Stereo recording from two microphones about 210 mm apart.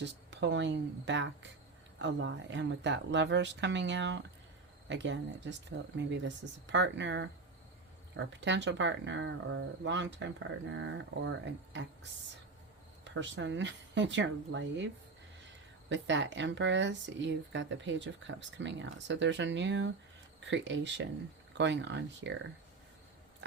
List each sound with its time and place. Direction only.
0.0 s speech: 55° right (ahead or behind)
13.1 s speech: 60° right (ahead or behind)
15.9 s speech: 60° right (ahead or behind)